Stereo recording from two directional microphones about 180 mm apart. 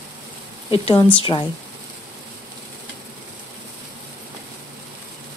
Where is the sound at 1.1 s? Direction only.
30° left (ahead or behind).